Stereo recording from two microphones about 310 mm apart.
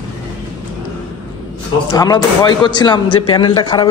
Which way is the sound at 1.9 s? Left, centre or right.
Centre.